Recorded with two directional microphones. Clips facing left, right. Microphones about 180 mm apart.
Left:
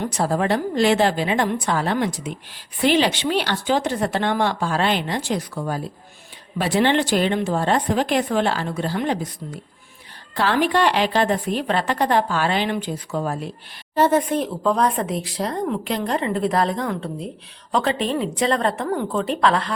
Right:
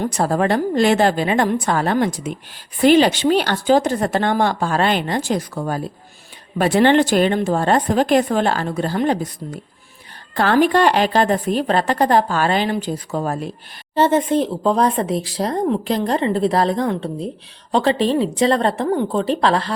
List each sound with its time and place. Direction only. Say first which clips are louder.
0.0 s a woman's voice: right 3 dB; 50° right (ahead or behind)
13.9 s speech: right 2 dB; 25° right (ahead or behind)